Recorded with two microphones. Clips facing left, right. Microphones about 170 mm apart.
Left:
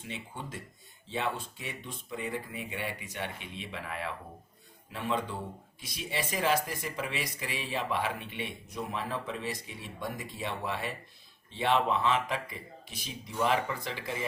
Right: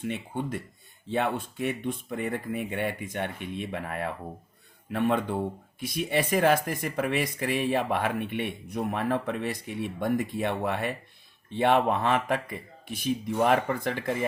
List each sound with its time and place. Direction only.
0.0 s speech: 55° right (ahead or behind)